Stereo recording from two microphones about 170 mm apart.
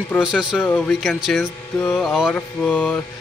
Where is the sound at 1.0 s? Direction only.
Centre (ahead or behind).